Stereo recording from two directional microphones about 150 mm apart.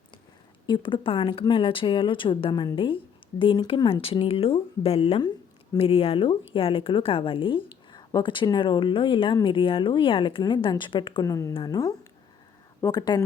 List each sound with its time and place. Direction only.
0.7 s a woman's voice: 30° left (ahead or behind)